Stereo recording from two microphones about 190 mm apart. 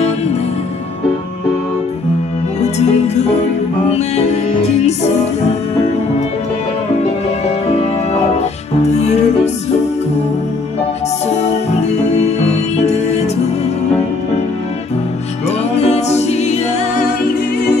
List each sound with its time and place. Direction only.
2.6 s music: 35° left (ahead or behind)
7.7 s music: 35° left (ahead or behind)
11.3 s music: 35° left (ahead or behind)
15.4 s music: 35° left (ahead or behind)